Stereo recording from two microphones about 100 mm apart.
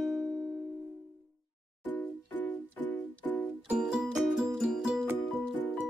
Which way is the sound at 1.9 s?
20° left (ahead or behind).